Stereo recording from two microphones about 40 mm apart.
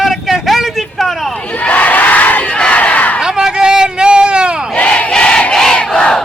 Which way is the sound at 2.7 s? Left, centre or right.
Left.